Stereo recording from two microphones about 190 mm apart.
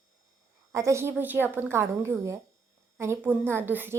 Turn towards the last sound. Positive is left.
turn(degrees=-10)  # may be behind; listen again after turning